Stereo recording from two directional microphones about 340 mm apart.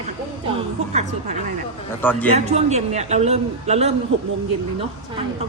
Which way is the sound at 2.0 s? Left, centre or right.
Centre.